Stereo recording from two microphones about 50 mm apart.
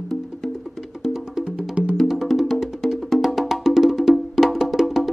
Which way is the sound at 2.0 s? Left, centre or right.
Centre.